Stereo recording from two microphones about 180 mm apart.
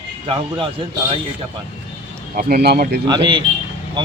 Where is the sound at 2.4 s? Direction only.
60° right (ahead or behind).